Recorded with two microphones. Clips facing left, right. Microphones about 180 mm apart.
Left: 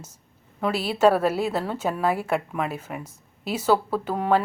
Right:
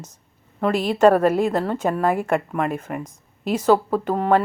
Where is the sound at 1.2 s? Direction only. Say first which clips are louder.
Right 5 dB; 50° right (ahead or behind).